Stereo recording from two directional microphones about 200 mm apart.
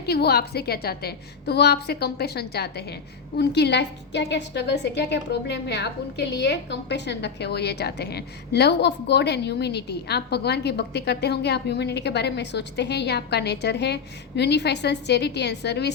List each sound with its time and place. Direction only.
0.0 s a woman's voice: 55° left (ahead or behind)